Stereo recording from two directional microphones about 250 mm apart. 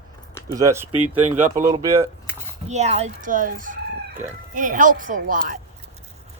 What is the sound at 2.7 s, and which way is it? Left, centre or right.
Speech, right.